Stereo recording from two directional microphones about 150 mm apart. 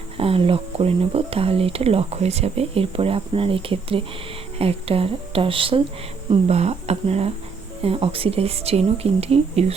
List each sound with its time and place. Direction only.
0.2 s speech: 40° right (ahead or behind)